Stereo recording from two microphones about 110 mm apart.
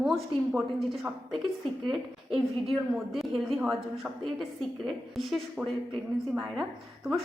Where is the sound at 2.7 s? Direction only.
Centre (ahead or behind).